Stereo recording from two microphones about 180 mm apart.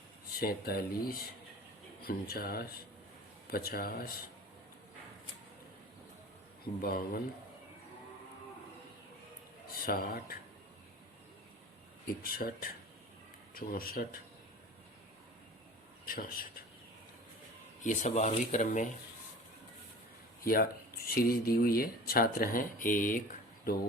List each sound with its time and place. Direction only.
0.3 s speech: 55° left (ahead or behind)
6.8 s speech: 55° left (ahead or behind)
9.8 s speech: 55° left (ahead or behind)
12.2 s speech: 55° left (ahead or behind)
16.0 s speech: 55° left (ahead or behind)
17.8 s speech: 40° left (ahead or behind)
20.4 s speech: 55° left (ahead or behind)